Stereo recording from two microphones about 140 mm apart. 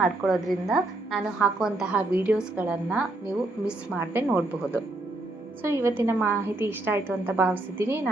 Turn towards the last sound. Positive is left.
turn(degrees=-15)  # may be behind; listen again after turning